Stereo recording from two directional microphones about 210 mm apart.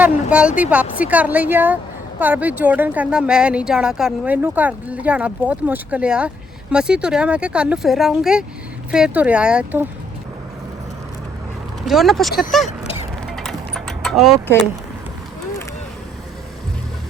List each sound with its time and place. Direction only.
0.0 s a woman's voice: 5° right (ahead or behind)
11.9 s a woman's voice: centre (ahead or behind)
13.3 s mechanisms: centre (ahead or behind)